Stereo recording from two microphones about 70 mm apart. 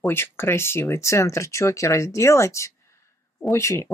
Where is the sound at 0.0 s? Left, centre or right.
Left.